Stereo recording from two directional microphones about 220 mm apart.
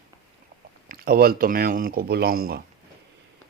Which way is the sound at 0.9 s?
40° right (ahead or behind).